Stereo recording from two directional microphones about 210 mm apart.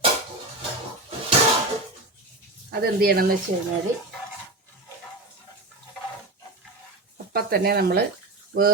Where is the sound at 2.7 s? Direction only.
50° right (ahead or behind).